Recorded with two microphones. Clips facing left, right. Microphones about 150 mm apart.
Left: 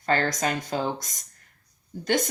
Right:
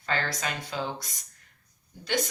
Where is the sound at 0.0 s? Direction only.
45° left (ahead or behind).